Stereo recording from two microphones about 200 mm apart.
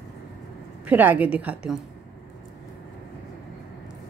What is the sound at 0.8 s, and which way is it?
Speech, 10° right (ahead or behind).